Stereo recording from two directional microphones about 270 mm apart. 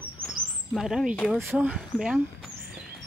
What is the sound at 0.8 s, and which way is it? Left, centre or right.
Speech, centre.